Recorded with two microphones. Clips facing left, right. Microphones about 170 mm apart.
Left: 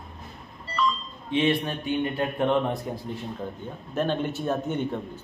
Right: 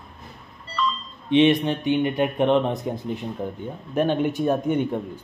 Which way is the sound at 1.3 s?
20° right (ahead or behind).